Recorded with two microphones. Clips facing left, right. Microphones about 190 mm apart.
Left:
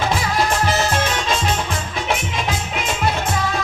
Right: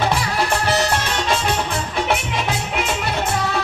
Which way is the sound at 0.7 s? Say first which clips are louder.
Even; 65° right (ahead or behind).